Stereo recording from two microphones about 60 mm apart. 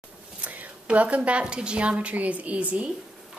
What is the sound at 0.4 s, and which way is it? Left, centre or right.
A woman's voice, right.